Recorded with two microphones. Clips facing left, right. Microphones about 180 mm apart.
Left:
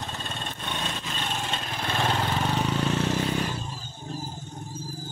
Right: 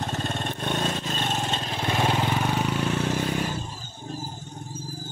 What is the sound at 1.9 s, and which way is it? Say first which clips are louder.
Vehicle: right 2 dB; 10° right (ahead or behind).